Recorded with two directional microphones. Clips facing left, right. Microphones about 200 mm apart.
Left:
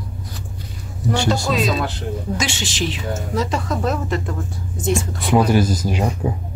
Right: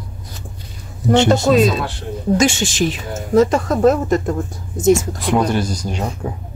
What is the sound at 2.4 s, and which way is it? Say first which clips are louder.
A woman's voice: right 8 dB; 50° right (ahead or behind).